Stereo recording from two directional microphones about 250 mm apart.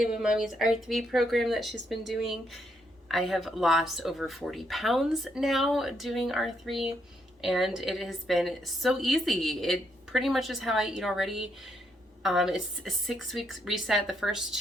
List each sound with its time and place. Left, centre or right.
0.0 s a woman's voice: centre